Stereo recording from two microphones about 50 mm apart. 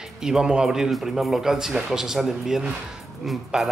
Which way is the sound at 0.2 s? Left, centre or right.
Centre.